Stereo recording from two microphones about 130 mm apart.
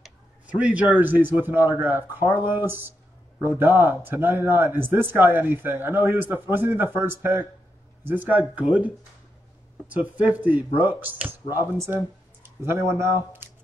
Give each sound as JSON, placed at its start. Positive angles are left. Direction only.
{"t": 0.0, "sound": "speech", "side_deg": -10}